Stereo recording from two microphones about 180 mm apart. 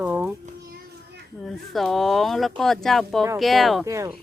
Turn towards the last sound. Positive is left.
turn(degrees=-15)  # may be behind; listen again after turning